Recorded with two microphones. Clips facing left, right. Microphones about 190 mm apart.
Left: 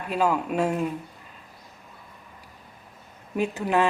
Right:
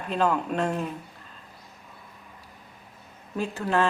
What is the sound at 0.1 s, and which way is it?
Speech, 10° left (ahead or behind).